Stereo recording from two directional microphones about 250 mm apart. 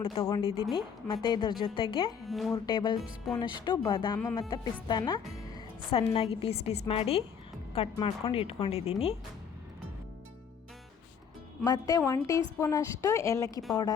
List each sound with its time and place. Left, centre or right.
0.0 s a woman's voice: left
2.2 s speech: centre
2.6 s a woman's voice: centre
11.6 s speech: centre